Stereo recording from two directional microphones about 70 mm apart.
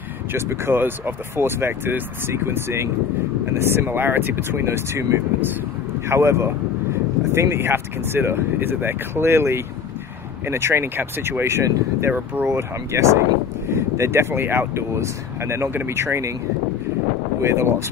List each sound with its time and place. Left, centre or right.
0.3 s speech: right
17.4 s speech: right